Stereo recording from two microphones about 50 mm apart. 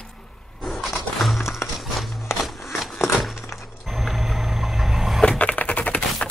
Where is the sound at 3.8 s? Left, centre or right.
Centre.